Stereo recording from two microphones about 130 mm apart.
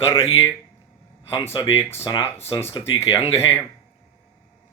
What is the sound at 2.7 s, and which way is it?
Speech, 45° left (ahead or behind).